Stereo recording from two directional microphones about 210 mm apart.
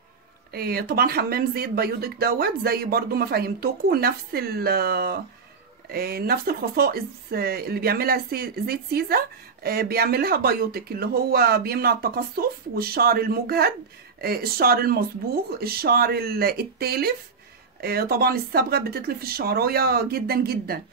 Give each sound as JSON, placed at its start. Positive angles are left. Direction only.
{"t": 0.5, "sound": "speech", "side_deg": -45}